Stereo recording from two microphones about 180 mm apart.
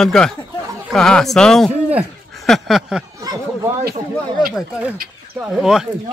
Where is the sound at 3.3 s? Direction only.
20° right (ahead or behind).